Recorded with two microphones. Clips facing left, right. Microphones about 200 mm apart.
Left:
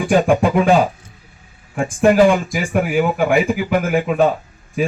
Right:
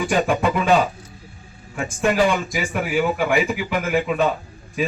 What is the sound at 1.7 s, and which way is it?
A man's voice, 50° left (ahead or behind).